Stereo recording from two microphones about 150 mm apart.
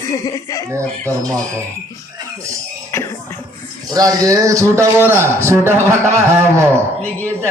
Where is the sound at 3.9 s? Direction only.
25° right (ahead or behind).